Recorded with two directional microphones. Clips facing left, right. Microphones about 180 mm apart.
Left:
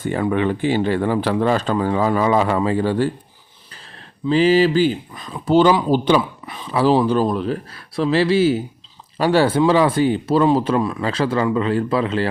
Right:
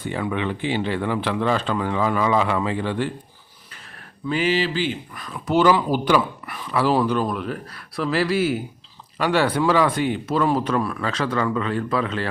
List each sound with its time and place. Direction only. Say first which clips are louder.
0.0 s speech: left 6 dB; 45° left (ahead or behind)
4.3 s speech: left 7 dB; 35° left (ahead or behind)
5.1 s speech: left 4 dB; 25° left (ahead or behind)